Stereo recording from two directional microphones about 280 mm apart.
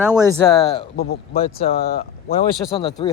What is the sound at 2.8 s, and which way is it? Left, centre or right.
Speech, centre.